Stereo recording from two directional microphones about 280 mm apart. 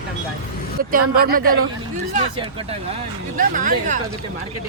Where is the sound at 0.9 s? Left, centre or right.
Right.